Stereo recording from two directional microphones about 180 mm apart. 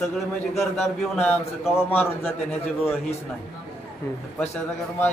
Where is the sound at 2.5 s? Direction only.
35° left (ahead or behind).